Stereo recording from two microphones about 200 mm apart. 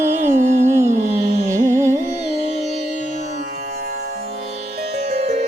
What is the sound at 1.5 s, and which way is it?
Music, 15° right (ahead or behind).